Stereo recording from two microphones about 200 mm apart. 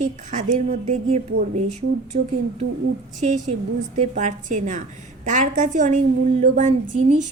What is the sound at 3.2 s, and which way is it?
A woman's voice, 35° right (ahead or behind).